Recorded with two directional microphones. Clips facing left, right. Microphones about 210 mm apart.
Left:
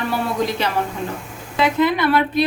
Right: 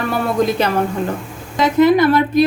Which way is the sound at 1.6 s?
45° right (ahead or behind).